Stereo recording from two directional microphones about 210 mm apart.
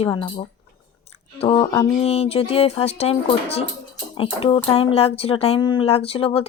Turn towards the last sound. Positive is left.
turn(degrees=25)  # may be behind; listen again after turning